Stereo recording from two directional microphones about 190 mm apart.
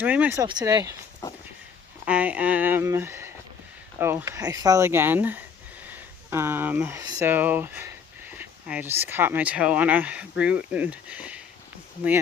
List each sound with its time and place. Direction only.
0.0 s speech: 10° right (ahead or behind)
1.2 s a sound: 15° left (ahead or behind)
2.0 s speech: 5° right (ahead or behind)